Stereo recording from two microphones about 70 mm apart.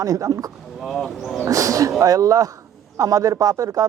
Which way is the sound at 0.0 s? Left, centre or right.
Right.